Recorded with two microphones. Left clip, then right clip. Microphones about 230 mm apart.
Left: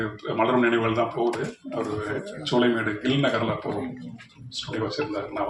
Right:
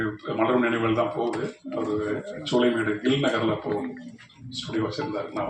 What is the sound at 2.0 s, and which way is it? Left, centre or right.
Speech, left.